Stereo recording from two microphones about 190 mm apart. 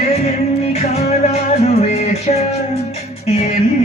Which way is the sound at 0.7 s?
35° left (ahead or behind).